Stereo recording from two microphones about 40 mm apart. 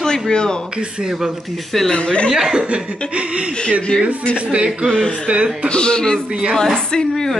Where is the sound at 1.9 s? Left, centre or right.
Left.